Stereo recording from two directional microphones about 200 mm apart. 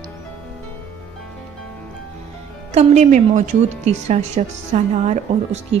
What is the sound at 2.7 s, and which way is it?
A woman's voice, 35° right (ahead or behind).